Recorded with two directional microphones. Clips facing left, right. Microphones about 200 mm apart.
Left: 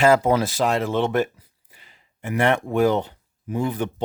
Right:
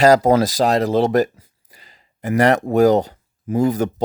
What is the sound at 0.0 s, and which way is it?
Speech, 40° right (ahead or behind).